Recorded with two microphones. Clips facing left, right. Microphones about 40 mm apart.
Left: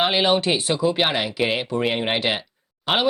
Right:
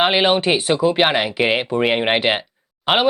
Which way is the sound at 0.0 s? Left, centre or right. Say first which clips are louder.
Right 3 dB; right.